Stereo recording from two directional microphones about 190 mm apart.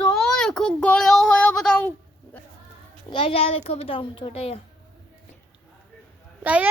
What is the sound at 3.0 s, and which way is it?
A child's voice, 25° left (ahead or behind).